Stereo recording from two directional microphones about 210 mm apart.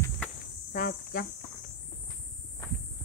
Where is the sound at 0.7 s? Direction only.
45° left (ahead or behind).